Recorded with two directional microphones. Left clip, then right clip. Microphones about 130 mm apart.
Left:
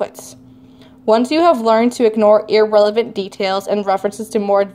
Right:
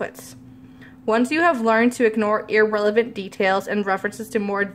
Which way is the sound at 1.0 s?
20° left (ahead or behind).